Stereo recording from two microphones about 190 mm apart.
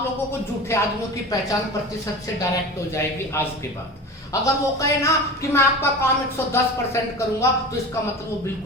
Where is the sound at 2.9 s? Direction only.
15° left (ahead or behind).